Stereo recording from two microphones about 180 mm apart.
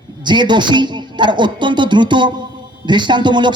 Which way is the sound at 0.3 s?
25° right (ahead or behind).